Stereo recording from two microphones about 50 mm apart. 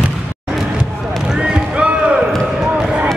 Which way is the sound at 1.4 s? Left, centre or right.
Right.